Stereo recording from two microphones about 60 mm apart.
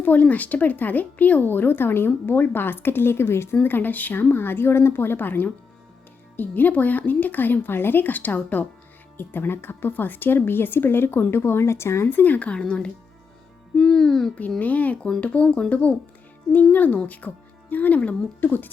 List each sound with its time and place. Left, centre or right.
0.0 s speech: left; by 14.3 s centre
14.6 s speech: left